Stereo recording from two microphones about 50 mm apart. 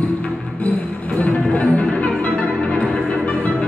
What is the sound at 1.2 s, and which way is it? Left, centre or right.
Music, left.